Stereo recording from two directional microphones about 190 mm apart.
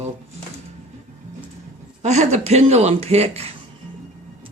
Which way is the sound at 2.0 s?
35° right (ahead or behind).